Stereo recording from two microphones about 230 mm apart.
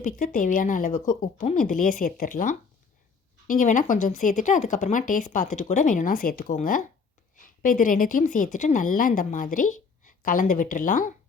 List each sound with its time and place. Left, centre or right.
0.0 s a woman's voice: left